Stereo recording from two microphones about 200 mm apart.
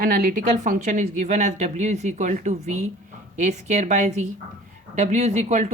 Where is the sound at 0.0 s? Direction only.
45° right (ahead or behind).